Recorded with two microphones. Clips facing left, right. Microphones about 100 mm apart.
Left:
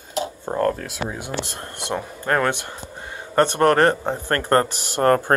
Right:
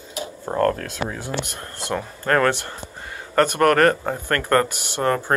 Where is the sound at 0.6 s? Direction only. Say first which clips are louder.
Right 2 dB; 10° left (ahead or behind).